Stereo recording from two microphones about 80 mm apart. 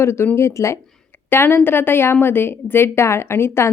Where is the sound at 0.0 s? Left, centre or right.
Left.